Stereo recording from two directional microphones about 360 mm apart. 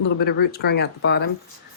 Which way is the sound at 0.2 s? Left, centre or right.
Left.